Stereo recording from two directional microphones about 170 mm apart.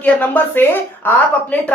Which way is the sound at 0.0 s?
10° left (ahead or behind).